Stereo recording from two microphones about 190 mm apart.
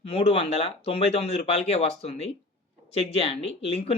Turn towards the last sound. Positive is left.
turn(degrees=30)  # may be behind; listen again after turning